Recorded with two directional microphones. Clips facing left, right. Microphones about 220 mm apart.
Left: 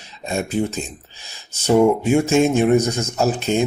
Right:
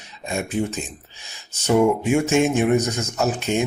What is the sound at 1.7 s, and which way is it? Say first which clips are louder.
Speech: left 3 dB; 35° left (ahead or behind).